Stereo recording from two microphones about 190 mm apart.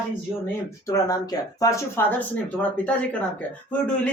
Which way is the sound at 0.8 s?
20° left (ahead or behind).